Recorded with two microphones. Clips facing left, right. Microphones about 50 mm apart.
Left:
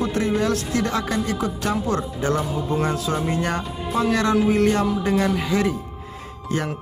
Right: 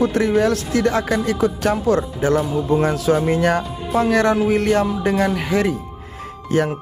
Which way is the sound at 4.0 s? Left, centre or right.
Right.